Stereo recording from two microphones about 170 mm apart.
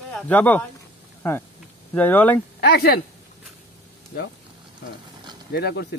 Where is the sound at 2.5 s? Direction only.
70° left (ahead or behind).